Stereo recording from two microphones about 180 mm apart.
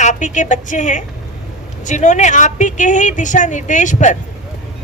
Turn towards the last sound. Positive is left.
turn(degrees=45)  # may be behind; listen again after turning